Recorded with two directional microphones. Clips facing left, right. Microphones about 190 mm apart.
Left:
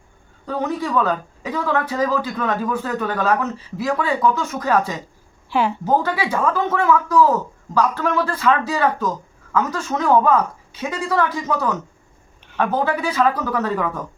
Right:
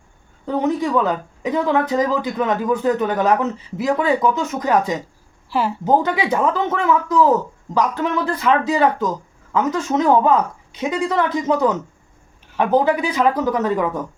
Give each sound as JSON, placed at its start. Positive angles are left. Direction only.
{"t": 0.4, "sound": "speech", "side_deg": -20}
{"t": 5.5, "sound": "a woman's voice", "side_deg": -5}
{"t": 5.8, "sound": "speech", "side_deg": -20}